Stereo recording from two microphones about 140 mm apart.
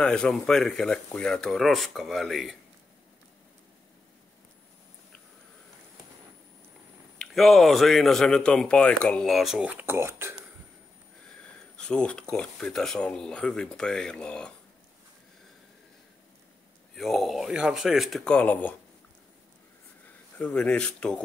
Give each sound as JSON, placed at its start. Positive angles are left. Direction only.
{"t": 0.0, "sound": "speech", "side_deg": 5}
{"t": 7.2, "sound": "speech", "side_deg": 0}
{"t": 11.3, "sound": "speech", "side_deg": 5}
{"t": 16.9, "sound": "speech", "side_deg": 0}
{"t": 20.3, "sound": "speech", "side_deg": 5}